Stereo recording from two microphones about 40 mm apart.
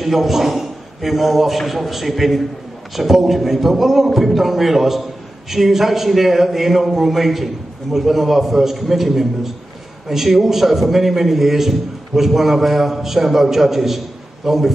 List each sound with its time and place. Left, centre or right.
0.0 s a man's voice: centre